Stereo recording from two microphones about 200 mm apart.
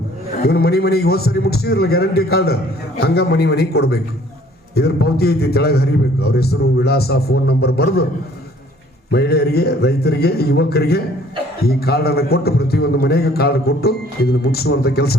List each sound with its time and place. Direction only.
0.4 s a man's voice: 50° left (ahead or behind)
9.1 s a man's voice: 55° left (ahead or behind)